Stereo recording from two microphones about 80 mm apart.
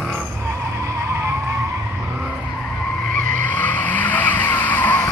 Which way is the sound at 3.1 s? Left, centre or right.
Centre.